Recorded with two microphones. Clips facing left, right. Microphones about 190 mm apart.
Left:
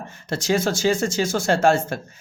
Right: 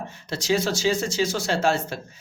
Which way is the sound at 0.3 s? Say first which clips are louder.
Left 2 dB; 50° left (ahead or behind).